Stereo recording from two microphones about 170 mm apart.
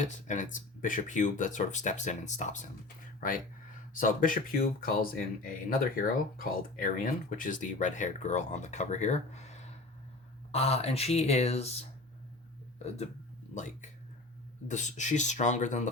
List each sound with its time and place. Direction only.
0.0 s speech: 45° left (ahead or behind)
3.9 s speech: 50° left (ahead or behind)
14.7 s speech: 45° left (ahead or behind)